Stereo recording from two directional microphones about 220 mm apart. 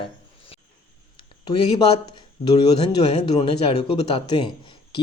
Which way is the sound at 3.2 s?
30° left (ahead or behind).